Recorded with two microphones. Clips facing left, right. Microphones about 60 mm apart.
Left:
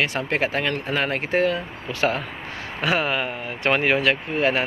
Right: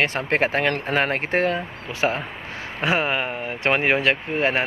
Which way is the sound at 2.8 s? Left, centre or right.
Right.